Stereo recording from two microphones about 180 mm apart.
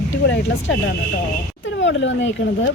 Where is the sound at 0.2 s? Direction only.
65° left (ahead or behind).